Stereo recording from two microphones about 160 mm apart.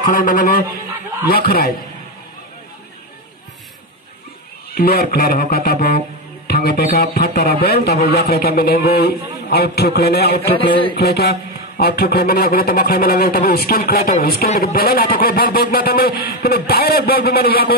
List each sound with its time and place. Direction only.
0.0 s a sound: 55° left (ahead or behind)
1.2 s speech: 70° left (ahead or behind)
4.7 s speech: 75° left (ahead or behind)
10.5 s speech: 35° left (ahead or behind)
11.0 s speech: 85° left